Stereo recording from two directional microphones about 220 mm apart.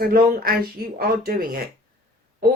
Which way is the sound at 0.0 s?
40° right (ahead or behind).